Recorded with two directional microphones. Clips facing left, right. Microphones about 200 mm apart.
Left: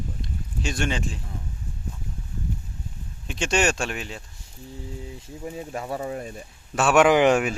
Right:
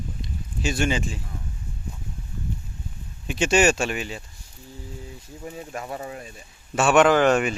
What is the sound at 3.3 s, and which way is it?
Speech, 5° right (ahead or behind).